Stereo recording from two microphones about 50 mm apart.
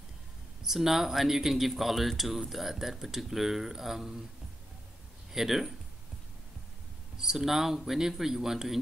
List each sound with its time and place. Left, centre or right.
0.7 s speech: centre
5.3 s speech: centre
7.2 s speech: centre